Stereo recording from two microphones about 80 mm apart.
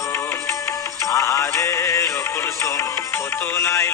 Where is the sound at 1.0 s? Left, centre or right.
Left.